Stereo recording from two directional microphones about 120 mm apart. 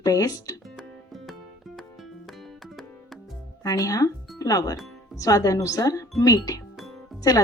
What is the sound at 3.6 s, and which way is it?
Speech, 30° left (ahead or behind).